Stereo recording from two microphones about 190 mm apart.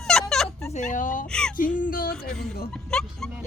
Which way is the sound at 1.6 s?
45° left (ahead or behind).